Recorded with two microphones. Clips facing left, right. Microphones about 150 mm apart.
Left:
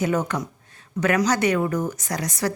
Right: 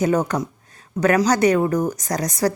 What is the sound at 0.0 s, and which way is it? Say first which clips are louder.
A woman's voice: right 4 dB; 40° right (ahead or behind).